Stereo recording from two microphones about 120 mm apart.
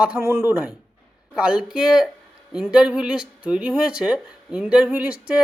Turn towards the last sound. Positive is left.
turn(degrees=-10)  # may be behind; listen again after turning